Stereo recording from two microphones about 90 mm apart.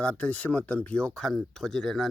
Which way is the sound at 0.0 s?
15° left (ahead or behind).